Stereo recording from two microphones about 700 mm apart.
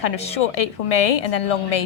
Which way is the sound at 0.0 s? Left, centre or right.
Left.